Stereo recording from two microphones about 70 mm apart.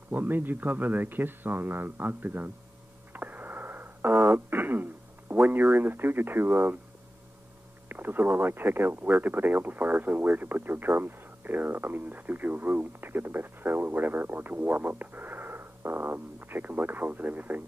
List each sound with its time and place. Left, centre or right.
0.1 s speech: right
3.1 s a sound: right
5.3 s speech: right
7.9 s speech: right